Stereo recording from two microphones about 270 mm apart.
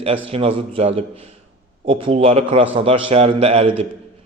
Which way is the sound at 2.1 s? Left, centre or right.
Right.